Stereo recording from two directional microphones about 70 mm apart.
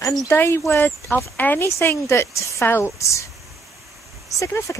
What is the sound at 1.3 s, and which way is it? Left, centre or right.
Speech, left.